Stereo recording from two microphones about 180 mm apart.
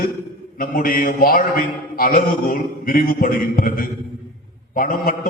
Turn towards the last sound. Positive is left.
turn(degrees=55)  # may be behind; listen again after turning